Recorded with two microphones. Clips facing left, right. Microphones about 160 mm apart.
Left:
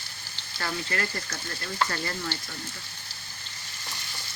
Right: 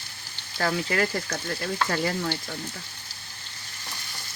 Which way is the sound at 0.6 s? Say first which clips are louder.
Right 6 dB; 70° right (ahead or behind).